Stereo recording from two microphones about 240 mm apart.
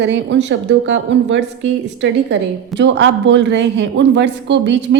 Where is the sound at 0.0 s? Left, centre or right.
Right.